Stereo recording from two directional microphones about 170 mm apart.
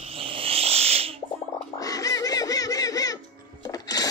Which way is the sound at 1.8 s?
20° left (ahead or behind).